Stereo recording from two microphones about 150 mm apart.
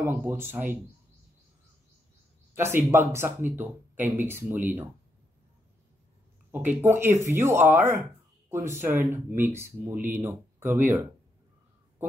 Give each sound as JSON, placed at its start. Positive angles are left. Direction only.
{"t": 0.0, "sound": "speech", "side_deg": -15}
{"t": 2.5, "sound": "speech", "side_deg": -15}
{"t": 6.5, "sound": "speech", "side_deg": -10}